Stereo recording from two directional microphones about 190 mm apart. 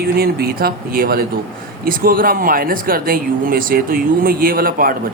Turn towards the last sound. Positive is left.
turn(degrees=-50)  # may be behind; listen again after turning